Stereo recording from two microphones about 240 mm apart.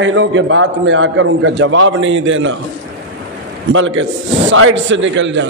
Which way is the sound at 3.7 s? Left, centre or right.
Right.